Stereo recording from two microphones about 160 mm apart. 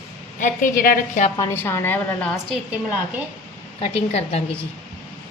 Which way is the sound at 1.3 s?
15° left (ahead or behind).